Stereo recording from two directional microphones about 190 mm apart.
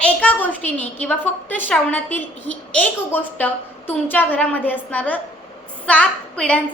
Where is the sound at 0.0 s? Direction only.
5° left (ahead or behind).